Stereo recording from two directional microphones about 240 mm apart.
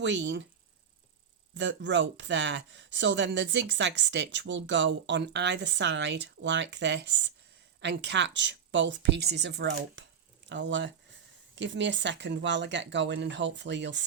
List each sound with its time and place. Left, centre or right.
0.0 s speech: right
1.5 s speech: right